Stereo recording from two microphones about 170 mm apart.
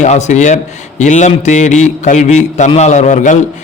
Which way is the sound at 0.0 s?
45° left (ahead or behind).